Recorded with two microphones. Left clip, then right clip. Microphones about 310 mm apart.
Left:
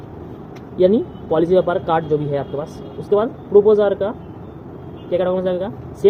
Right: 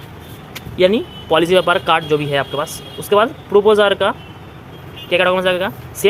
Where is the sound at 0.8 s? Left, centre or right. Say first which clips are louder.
Right 1 dB; right.